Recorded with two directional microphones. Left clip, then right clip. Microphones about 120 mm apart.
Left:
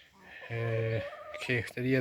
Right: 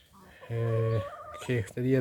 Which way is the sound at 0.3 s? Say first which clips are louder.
Right 2 dB; 10° right (ahead or behind).